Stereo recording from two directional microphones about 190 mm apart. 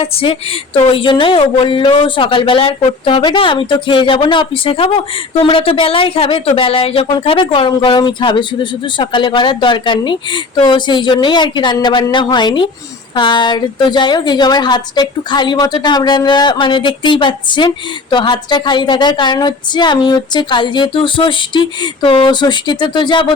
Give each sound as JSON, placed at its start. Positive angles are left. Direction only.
{"t": 0.0, "sound": "a woman's voice", "side_deg": 30}